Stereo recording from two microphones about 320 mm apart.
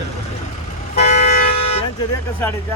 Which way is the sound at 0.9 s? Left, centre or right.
Left.